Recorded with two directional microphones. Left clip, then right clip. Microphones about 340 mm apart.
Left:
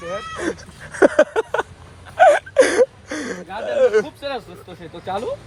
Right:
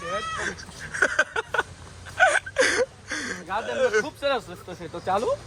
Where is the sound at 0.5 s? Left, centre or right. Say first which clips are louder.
Even; centre.